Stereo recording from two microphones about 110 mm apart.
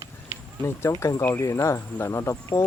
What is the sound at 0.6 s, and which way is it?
Speech, 25° left (ahead or behind).